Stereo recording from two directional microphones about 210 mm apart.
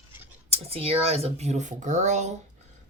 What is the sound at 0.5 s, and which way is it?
Speech, 30° right (ahead or behind).